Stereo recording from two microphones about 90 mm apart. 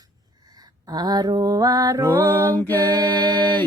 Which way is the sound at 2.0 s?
25° right (ahead or behind).